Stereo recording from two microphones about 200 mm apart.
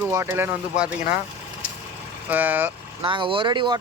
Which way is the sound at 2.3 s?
10° right (ahead or behind).